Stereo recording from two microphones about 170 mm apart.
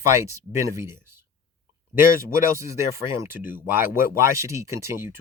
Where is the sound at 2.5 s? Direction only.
15° right (ahead or behind).